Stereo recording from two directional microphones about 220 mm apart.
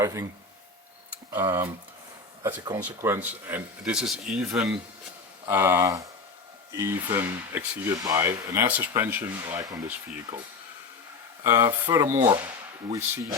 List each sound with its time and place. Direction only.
0.0 s speech: 15° right (ahead or behind)
11.4 s speech: 10° right (ahead or behind)